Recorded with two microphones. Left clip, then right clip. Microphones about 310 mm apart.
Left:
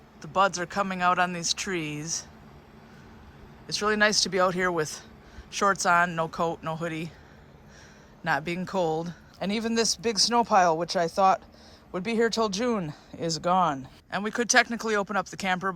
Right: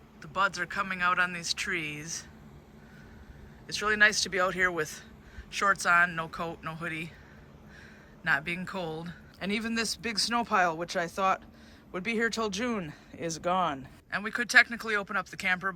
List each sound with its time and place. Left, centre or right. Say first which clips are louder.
0.2 s speech: left 5 dB; centre
3.7 s speech: left 1 dB; centre
8.2 s speech: left 1 dB; centre